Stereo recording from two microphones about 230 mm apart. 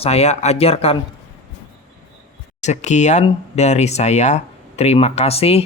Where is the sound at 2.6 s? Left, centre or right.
Left.